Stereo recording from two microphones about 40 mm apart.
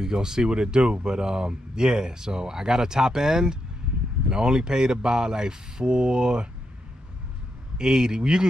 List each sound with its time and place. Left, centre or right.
0.0 s speech: centre
7.7 s speech: centre